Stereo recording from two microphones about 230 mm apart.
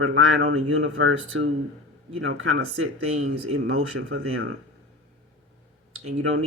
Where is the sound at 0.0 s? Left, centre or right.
Right.